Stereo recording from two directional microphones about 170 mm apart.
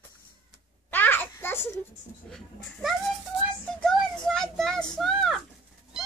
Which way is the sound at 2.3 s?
Centre (ahead or behind).